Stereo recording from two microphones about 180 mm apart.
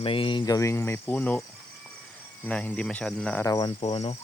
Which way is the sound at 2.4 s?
5° left (ahead or behind).